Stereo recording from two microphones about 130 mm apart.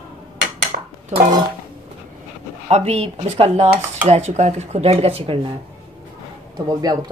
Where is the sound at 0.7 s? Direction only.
80° right.